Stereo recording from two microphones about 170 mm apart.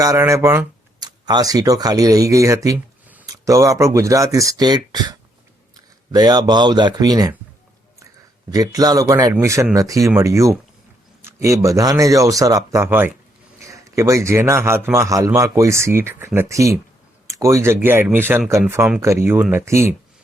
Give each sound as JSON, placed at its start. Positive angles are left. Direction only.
{"t": 0.0, "sound": "speech", "side_deg": -20}
{"t": 8.4, "sound": "a man's voice", "side_deg": -20}